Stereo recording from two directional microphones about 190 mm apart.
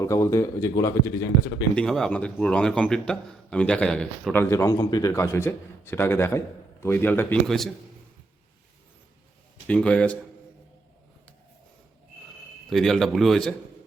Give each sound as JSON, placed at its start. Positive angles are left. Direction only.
{"t": 0.0, "sound": "a man's voice", "side_deg": 15}
{"t": 1.7, "sound": "a man's voice", "side_deg": 5}
{"t": 9.6, "sound": "a man's voice", "side_deg": 5}
{"t": 12.7, "sound": "speech", "side_deg": 0}